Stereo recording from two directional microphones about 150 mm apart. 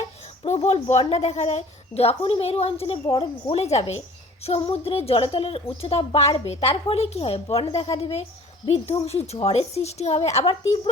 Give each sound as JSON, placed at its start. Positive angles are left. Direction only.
{"t": 0.4, "sound": "a woman's voice", "side_deg": 45}